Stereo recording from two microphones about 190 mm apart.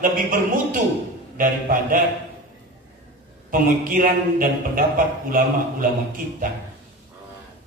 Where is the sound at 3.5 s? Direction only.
45° right (ahead or behind).